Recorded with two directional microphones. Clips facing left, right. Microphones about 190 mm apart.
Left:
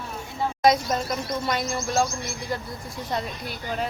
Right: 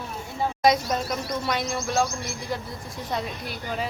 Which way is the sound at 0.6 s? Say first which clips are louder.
Left 1 dB; centre (ahead or behind).